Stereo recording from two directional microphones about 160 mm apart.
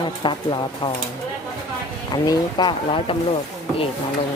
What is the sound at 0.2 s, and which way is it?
Speech, 30° left (ahead or behind).